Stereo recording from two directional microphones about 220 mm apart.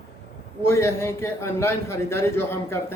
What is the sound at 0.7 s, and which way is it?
A man's voice, 10° left (ahead or behind).